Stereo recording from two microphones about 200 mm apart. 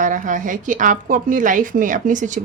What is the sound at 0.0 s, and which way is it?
Speech, 40° right (ahead or behind).